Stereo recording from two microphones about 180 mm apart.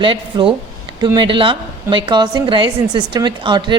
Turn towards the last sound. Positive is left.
turn(degrees=-25)  # may be behind; listen again after turning